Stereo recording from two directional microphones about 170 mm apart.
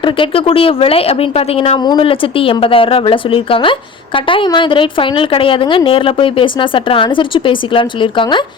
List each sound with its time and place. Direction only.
0.0 s speech: 30° left (ahead or behind)